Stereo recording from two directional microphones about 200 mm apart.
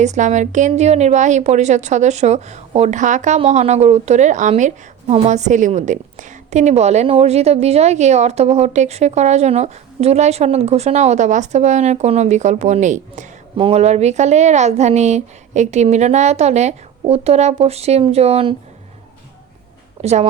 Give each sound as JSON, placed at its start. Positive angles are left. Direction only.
{"t": 0.0, "sound": "a woman's voice", "side_deg": -35}
{"t": 20.0, "sound": "speech", "side_deg": -35}